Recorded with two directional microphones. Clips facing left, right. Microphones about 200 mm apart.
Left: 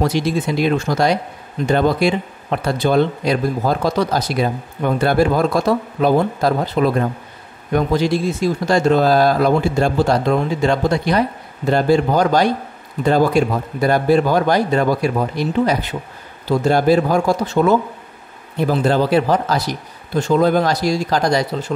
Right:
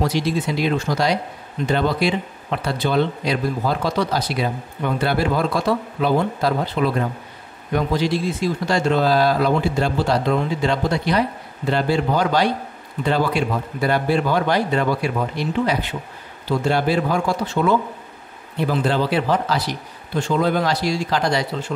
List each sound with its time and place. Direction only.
0.0 s speech: 50° left (ahead or behind)